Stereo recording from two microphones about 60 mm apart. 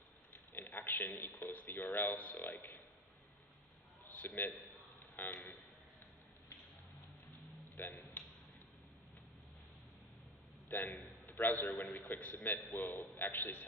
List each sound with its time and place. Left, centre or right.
0.3 s a man's voice: left
4.2 s a man's voice: left
7.7 s speech: left
10.7 s a man's voice: left